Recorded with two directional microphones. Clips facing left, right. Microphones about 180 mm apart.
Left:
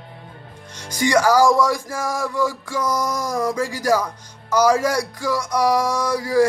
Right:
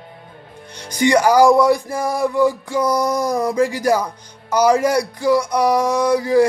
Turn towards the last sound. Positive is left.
turn(degrees=-20)  # may be behind; listen again after turning